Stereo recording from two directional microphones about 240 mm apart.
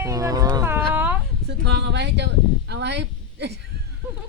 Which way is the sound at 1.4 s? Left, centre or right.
Right.